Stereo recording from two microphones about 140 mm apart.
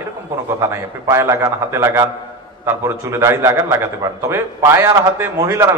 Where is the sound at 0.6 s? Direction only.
15° right (ahead or behind).